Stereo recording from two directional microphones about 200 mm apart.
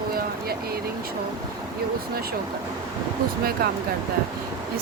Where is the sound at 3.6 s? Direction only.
50° right (ahead or behind).